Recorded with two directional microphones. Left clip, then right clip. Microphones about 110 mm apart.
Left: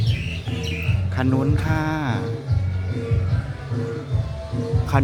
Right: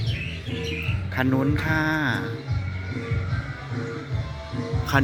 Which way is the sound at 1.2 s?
5° left (ahead or behind).